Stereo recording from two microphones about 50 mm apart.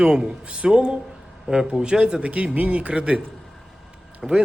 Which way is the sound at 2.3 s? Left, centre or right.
Right.